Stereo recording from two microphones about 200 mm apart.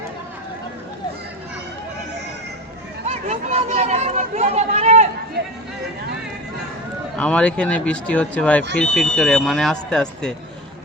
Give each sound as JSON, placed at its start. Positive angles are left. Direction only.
{"t": 3.2, "sound": "speech", "side_deg": -30}
{"t": 7.2, "sound": "speech", "side_deg": 5}